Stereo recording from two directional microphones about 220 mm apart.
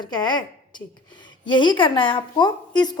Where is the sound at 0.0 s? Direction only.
20° left (ahead or behind).